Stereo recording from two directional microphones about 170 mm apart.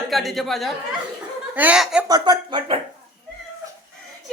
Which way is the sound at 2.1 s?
25° right (ahead or behind).